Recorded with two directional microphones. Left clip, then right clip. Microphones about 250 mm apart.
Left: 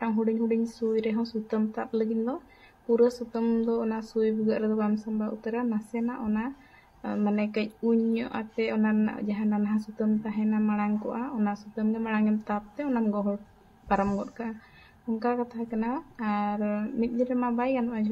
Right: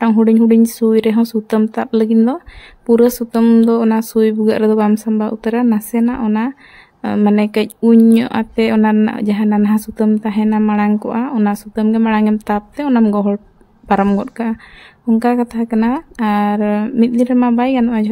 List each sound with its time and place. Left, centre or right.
0.0 s speech: right